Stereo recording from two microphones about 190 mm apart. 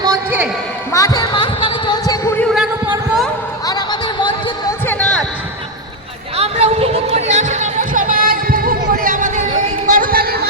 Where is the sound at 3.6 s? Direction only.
20° left (ahead or behind).